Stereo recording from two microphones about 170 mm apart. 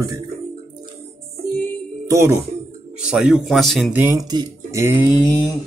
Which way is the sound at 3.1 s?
5° right (ahead or behind).